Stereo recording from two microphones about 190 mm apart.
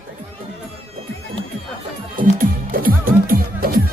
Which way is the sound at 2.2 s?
45° right (ahead or behind).